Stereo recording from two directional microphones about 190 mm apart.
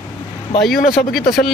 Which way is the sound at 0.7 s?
50° left (ahead or behind).